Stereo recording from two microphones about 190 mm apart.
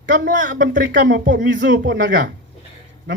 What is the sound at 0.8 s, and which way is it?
A man's voice, 65° right (ahead or behind).